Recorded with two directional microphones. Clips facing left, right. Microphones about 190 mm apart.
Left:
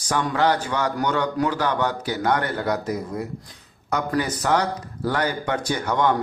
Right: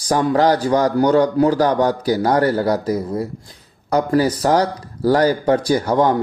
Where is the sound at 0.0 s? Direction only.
35° right (ahead or behind).